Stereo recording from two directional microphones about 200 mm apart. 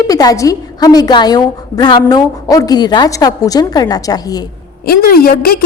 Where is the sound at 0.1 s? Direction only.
20° left (ahead or behind).